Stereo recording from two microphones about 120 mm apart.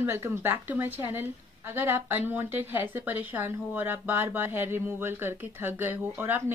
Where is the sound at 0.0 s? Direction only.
20° right (ahead or behind).